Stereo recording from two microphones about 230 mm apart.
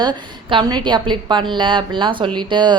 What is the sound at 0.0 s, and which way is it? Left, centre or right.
A woman's voice, centre.